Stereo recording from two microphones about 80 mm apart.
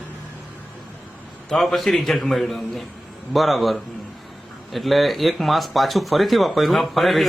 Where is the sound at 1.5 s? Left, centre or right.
Centre.